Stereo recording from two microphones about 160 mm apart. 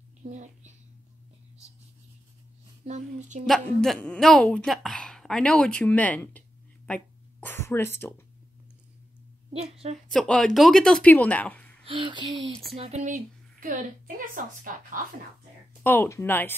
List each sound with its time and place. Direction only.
0.2 s speech: 50° right (ahead or behind)
2.8 s a child's voice: 45° right (ahead or behind)
3.4 s a woman's voice: centre (ahead or behind)
6.9 s a sound: 10° left (ahead or behind)
9.5 s a sound: 40° right (ahead or behind)
10.0 s speech: 5° left (ahead or behind)
11.8 s a sound: 30° right (ahead or behind)
12.7 s a woman's voice: 40° right (ahead or behind); by 15.0 s 55° right (ahead or behind)
15.8 s speech: 10° left (ahead or behind)